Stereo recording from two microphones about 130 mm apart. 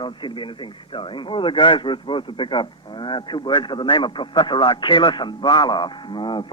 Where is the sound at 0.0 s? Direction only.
40° left (ahead or behind).